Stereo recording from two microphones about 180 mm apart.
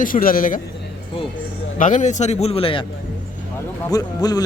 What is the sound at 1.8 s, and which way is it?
A man's voice, 45° left (ahead or behind).